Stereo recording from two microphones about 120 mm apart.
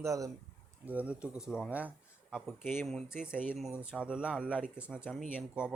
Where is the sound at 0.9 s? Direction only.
10° right (ahead or behind).